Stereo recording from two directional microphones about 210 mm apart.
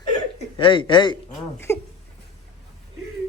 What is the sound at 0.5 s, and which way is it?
Speech, 25° left (ahead or behind).